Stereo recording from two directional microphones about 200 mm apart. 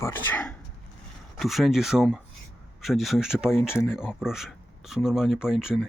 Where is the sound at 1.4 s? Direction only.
Centre (ahead or behind).